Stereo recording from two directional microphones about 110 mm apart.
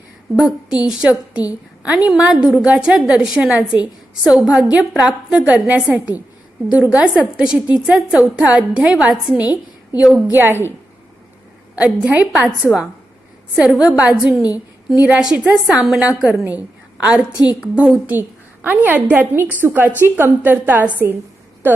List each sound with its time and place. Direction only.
0.4 s a woman's voice: 5° right (ahead or behind)
9.5 s a woman's voice: 35° left (ahead or behind)
10.2 s a woman's voice: 15° right (ahead or behind)
11.8 s a woman's voice: 10° right (ahead or behind)
13.6 s a woman's voice: 10° right (ahead or behind)